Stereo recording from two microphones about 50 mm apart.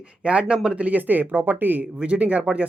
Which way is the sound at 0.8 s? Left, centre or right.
Right.